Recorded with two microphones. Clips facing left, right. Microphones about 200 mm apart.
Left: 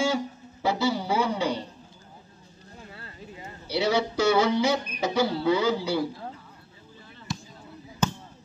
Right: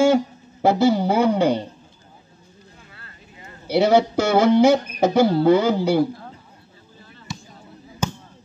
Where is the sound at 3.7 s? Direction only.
50° right (ahead or behind).